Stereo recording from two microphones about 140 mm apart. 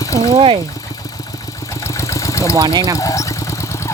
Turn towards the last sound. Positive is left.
turn(degrees=20)  # may be behind; listen again after turning